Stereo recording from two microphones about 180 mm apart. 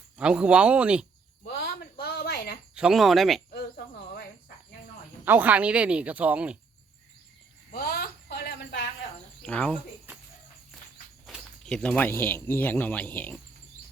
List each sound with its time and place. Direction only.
0.2 s speech: 5° right (ahead or behind)
1.5 s a sound: 60° left (ahead or behind)
2.7 s speech: 5° right (ahead or behind)
3.5 s cricket: 60° left (ahead or behind)
5.2 s speech: 10° right (ahead or behind)
7.7 s a sound: 60° left (ahead or behind)
9.4 s speech: 5° left (ahead or behind)
11.3 s speech: 5° left (ahead or behind)